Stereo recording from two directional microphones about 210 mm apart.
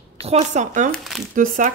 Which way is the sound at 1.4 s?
40° right (ahead or behind).